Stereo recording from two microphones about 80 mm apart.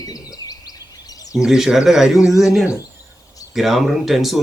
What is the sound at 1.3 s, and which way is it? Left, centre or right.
Speech, centre.